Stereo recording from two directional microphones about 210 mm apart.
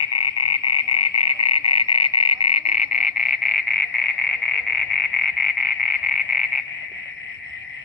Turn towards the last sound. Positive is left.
turn(degrees=45)  # may be behind; listen again after turning